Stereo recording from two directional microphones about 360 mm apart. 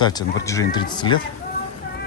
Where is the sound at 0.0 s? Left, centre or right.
Centre.